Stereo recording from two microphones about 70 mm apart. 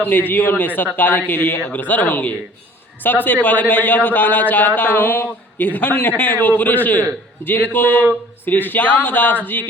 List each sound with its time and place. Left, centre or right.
0.1 s a man's voice: left